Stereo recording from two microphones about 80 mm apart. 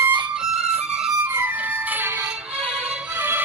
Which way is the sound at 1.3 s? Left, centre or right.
Right.